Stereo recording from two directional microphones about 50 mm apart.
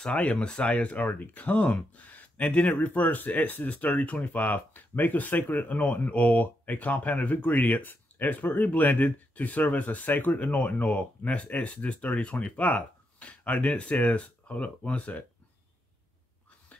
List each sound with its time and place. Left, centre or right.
0.0 s speech: left